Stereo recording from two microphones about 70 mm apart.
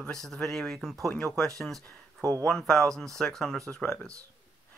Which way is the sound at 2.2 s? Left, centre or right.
Right.